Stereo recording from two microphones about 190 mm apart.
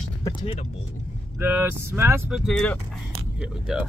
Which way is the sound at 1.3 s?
10° right (ahead or behind).